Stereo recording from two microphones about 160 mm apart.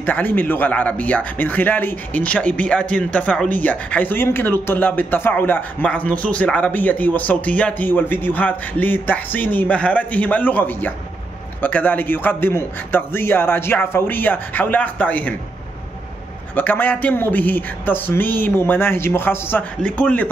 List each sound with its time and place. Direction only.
0.0 s speech: 10° left (ahead or behind)
16.5 s speech: 10° left (ahead or behind)